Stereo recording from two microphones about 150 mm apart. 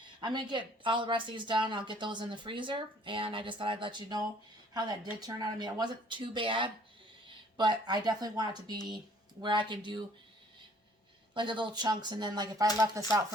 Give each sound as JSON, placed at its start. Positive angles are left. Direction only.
{"t": 0.0, "sound": "speech", "side_deg": -30}
{"t": 11.3, "sound": "speech", "side_deg": -30}